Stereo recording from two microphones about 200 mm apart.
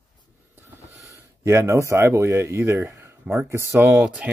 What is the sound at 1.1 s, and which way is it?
Speech, 15° right (ahead or behind).